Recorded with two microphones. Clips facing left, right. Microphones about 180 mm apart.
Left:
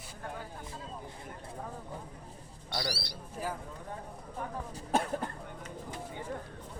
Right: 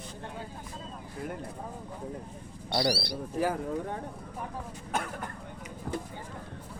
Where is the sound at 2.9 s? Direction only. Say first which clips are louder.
Right 9 dB; 65° right (ahead or behind).